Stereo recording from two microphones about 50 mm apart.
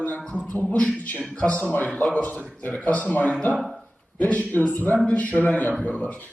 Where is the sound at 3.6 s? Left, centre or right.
Centre.